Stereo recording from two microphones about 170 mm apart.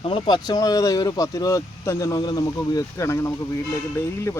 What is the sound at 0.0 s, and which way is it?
Speech, 30° left (ahead or behind).